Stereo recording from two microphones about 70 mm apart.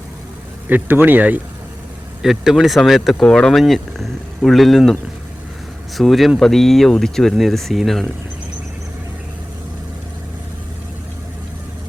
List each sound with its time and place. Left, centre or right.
0.7 s speech: right
2.2 s speech: centre
3.2 s speech: centre
6.0 s speech: centre